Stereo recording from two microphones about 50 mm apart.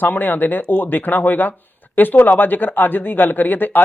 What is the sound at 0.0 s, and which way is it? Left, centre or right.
Speech, left.